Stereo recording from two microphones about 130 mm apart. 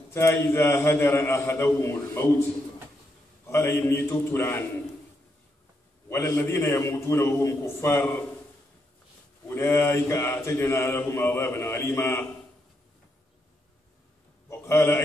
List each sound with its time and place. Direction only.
0.1 s mantra: 20° left (ahead or behind)
3.4 s mantra: 20° left (ahead or behind)
6.0 s mantra: 20° left (ahead or behind)
9.5 s mantra: 15° left (ahead or behind)
14.5 s a sound: 20° left (ahead or behind)